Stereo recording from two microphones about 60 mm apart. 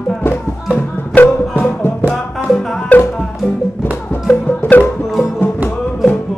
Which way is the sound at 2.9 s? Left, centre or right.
Left.